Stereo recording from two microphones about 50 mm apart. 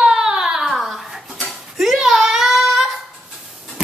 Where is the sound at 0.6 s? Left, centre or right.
Centre.